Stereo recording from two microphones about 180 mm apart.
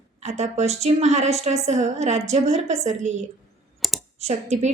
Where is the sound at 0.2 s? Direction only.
40° right (ahead or behind).